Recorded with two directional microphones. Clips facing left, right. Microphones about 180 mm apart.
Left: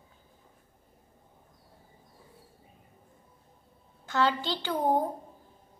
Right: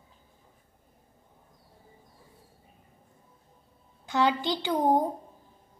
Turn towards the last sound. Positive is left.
turn(degrees=-15)  # may be behind; listen again after turning